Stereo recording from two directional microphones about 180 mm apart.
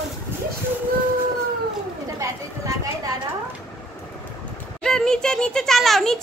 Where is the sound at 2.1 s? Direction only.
20° right (ahead or behind).